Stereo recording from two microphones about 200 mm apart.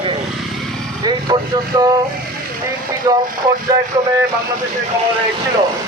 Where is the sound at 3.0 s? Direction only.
15° right (ahead or behind).